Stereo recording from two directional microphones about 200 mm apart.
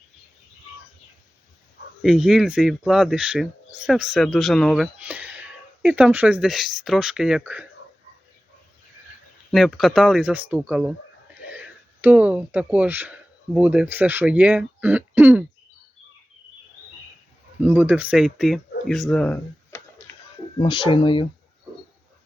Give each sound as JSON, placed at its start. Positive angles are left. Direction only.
{"t": 2.0, "sound": "speech", "side_deg": 0}
{"t": 9.5, "sound": "speech", "side_deg": 0}
{"t": 12.0, "sound": "speech", "side_deg": -5}
{"t": 17.6, "sound": "speech", "side_deg": -10}
{"t": 20.6, "sound": "speech", "side_deg": 25}